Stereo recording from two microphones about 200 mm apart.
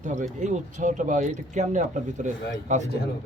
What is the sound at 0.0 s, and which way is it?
Speech, 35° right (ahead or behind).